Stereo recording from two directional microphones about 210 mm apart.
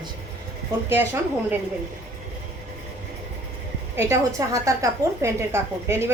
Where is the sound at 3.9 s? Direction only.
10° right (ahead or behind).